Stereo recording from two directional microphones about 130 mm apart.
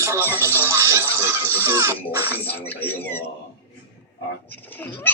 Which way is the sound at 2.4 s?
15° left (ahead or behind).